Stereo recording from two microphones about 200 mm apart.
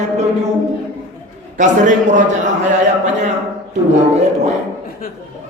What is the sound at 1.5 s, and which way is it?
Speech, 40° right (ahead or behind).